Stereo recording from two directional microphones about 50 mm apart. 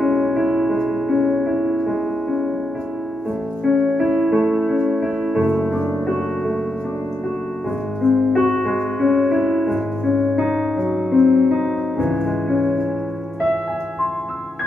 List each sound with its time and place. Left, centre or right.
0.0 s music: centre
3.6 s music: centre
5.7 s music: centre
8.0 s piano: centre
11.1 s music: centre
11.4 s music: centre